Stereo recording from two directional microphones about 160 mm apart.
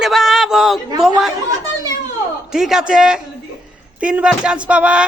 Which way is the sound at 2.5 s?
5° right (ahead or behind).